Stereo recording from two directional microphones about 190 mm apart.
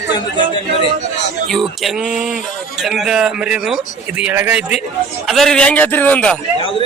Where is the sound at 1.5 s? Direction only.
Centre (ahead or behind).